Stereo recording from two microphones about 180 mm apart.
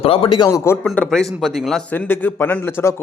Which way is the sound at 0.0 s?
30° left (ahead or behind).